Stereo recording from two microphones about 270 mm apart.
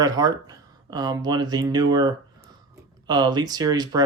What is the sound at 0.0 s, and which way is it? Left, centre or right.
Speech, centre.